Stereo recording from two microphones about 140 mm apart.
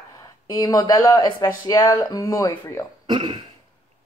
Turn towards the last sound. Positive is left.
turn(degrees=-35)  # may be behind; listen again after turning